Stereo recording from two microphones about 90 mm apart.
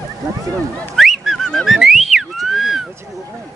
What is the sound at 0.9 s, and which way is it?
Whistling, centre (ahead or behind).